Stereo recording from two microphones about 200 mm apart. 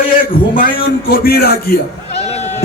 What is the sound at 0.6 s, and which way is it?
A man's voice, 50° left (ahead or behind).